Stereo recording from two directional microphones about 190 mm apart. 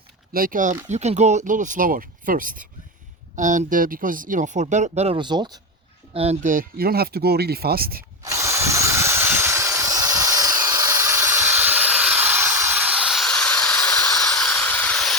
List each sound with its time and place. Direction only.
0.3 s speech: 45° right (ahead or behind); by 5.5 s 25° right (ahead or behind)
6.1 s speech: 40° right (ahead or behind)
8.2 s tools: 15° right (ahead or behind); by 15.2 s 5° left (ahead or behind)